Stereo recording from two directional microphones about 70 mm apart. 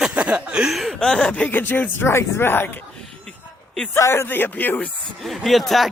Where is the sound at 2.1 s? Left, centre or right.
Left.